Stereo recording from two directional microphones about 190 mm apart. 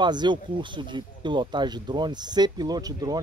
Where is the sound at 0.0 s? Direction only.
25° right (ahead or behind).